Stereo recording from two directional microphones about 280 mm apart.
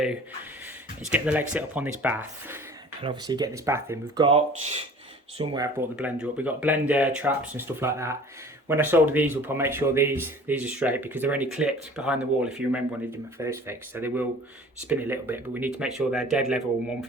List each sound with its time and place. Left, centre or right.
1.1 s speech: centre
4.3 s speech: right; by 16.6 s centre